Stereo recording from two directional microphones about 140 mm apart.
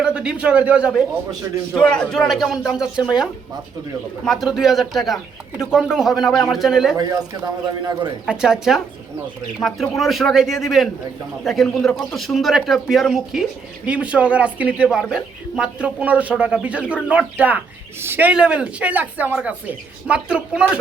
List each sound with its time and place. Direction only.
0.0 s speech: 5° right (ahead or behind)
1.8 s speech: 5° left (ahead or behind)
4.3 s speech: centre (ahead or behind)
6.9 s a man's voice: 25° right (ahead or behind)
8.3 s speech: 5° right (ahead or behind)